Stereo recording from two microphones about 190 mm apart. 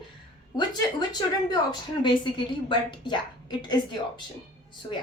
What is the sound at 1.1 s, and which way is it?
A woman's voice, 20° left (ahead or behind).